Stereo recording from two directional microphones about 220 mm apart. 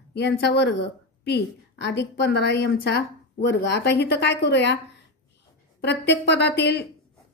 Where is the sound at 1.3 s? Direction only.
50° left (ahead or behind).